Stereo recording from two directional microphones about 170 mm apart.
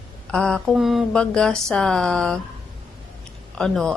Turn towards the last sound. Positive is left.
turn(degrees=5)  # may be behind; listen again after turning